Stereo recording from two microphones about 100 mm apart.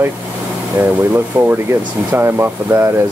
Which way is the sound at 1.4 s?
20° right (ahead or behind).